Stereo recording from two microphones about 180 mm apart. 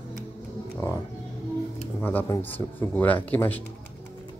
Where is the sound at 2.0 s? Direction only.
10° left (ahead or behind).